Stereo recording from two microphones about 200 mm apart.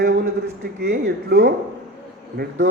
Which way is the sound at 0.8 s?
50° right (ahead or behind).